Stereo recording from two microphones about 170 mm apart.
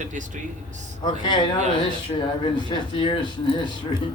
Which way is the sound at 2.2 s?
30° left (ahead or behind).